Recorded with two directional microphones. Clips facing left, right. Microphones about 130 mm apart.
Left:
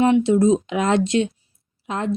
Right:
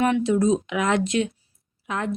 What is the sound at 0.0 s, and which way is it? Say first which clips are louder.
A woman's voice: left 4 dB; 25° left (ahead or behind).